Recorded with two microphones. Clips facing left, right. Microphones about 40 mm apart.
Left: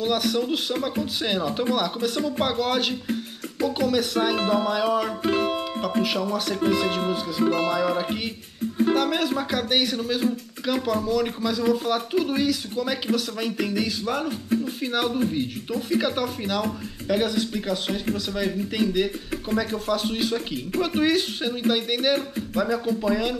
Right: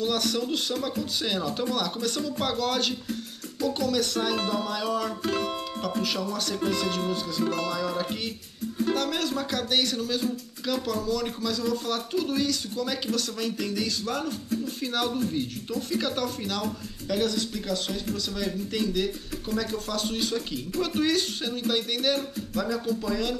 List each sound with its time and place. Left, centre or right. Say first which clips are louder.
0.0 s speech: left 3 dB; centre
1.2 s music: left 4 dB; centre
8.9 s speech: left 5 dB; centre
14.5 s music: left 6 dB; left
16.2 s speech: left 4 dB; centre
17.1 s music: left 4 dB; centre